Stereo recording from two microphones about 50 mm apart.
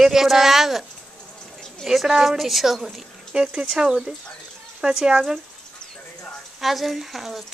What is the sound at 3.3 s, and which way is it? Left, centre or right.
Speech, centre.